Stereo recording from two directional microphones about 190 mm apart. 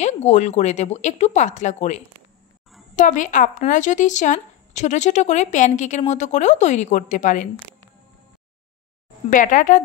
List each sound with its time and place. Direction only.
0.0 s speech: 35° left (ahead or behind)
9.3 s a woman's voice: 45° left (ahead or behind)